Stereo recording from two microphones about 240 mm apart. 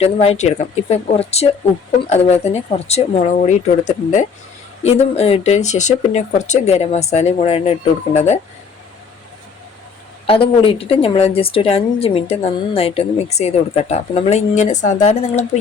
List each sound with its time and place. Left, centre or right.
0.0 s a woman's voice: left
10.2 s a woman's voice: left